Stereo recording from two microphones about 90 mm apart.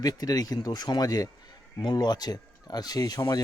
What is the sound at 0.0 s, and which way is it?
A man's voice, 45° left (ahead or behind).